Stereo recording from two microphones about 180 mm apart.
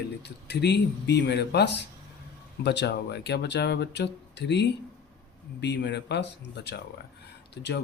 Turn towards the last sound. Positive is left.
turn(degrees=70)  # may be behind; listen again after turning